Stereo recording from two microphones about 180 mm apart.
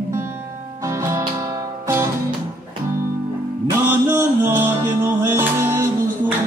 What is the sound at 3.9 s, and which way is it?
Music, 15° right (ahead or behind).